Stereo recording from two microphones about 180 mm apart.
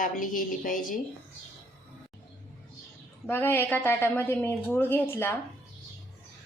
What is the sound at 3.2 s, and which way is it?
A woman's voice, 10° left (ahead or behind).